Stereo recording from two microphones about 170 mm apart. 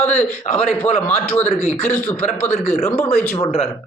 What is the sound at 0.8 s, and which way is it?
Speech, 10° left (ahead or behind).